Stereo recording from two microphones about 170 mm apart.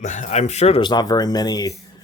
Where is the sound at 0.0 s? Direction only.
45° left (ahead or behind).